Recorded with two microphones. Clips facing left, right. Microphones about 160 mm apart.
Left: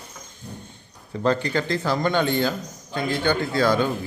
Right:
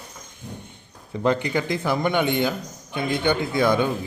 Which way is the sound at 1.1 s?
15° right (ahead or behind).